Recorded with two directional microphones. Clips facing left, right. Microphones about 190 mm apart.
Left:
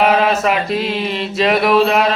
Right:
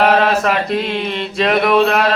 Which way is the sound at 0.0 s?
Centre (ahead or behind).